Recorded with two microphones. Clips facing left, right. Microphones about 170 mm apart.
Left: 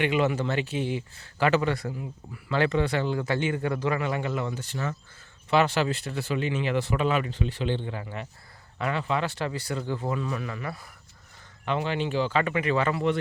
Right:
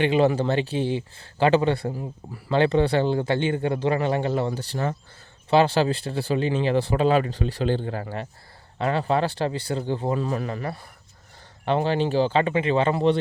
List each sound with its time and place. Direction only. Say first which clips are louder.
0.0 s speech: right 5 dB; 30° right (ahead or behind)